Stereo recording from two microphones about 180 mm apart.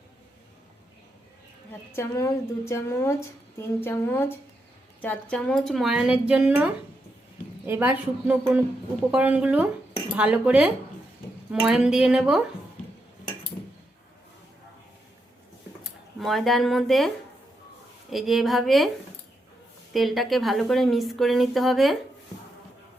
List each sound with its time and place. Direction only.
1.9 s a woman's voice: 15° left (ahead or behind); by 12.4 s 5° right (ahead or behind)
16.2 s a woman's voice: centre (ahead or behind)
18.1 s a woman's voice: centre (ahead or behind)
19.9 s a woman's voice: centre (ahead or behind)